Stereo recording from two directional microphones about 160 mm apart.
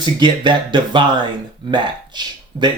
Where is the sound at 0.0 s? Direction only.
30° right (ahead or behind).